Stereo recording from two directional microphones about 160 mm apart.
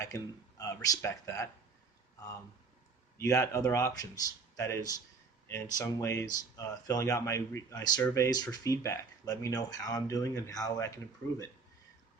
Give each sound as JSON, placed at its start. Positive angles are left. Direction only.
{"t": 0.0, "sound": "speech", "side_deg": 20}
{"t": 3.2, "sound": "speech", "side_deg": 20}